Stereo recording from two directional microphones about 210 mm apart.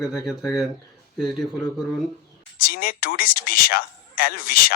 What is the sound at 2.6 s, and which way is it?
Speech, 45° left (ahead or behind).